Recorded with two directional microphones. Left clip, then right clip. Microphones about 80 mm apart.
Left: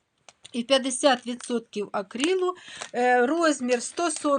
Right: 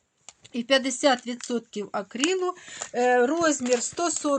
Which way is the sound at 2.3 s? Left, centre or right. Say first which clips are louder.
Left 2 dB; right.